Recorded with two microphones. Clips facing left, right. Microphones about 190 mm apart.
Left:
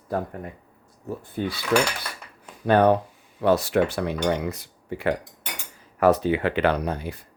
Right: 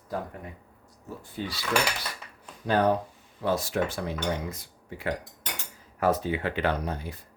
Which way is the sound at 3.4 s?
70° left (ahead or behind).